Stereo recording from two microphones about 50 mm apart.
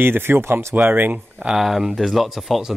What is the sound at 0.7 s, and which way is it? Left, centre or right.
Speech, right.